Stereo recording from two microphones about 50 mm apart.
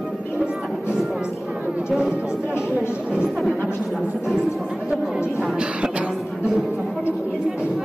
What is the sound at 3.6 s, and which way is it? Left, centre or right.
Music, centre.